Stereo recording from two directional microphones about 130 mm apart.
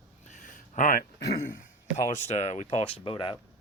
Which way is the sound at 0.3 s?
75° left (ahead or behind).